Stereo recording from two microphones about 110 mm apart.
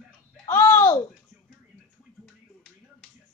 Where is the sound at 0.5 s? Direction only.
25° left (ahead or behind).